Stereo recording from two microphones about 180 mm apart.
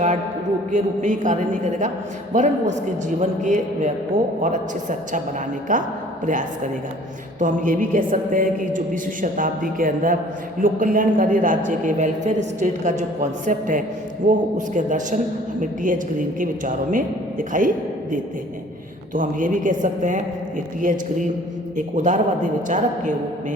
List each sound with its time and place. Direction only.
0.7 s a man's voice: 45° right (ahead or behind)
7.3 s a man's voice: 45° right (ahead or behind)
19.1 s a man's voice: 45° right (ahead or behind)